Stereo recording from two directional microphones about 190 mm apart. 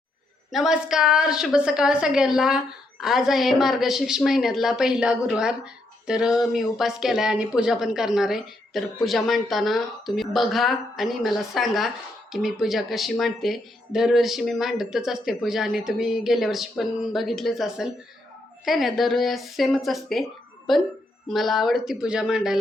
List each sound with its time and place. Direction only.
0.5 s a woman's voice: centre (ahead or behind)
21.2 s a woman's voice: centre (ahead or behind)